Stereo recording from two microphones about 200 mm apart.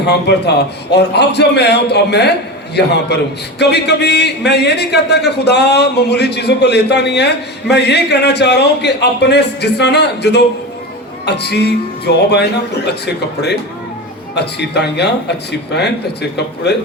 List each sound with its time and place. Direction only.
0.0 s a man's voice: 55° left (ahead or behind)
14.3 s a man's voice: 55° left (ahead or behind)